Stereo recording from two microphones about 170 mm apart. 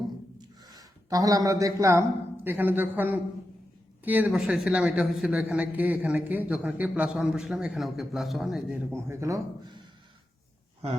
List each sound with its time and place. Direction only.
0.6 s speech: 20° right (ahead or behind); by 8.8 s 5° right (ahead or behind)
8.9 s speech: 15° right (ahead or behind)